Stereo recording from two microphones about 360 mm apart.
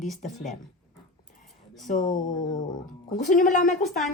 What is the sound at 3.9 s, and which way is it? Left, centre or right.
Speech, centre.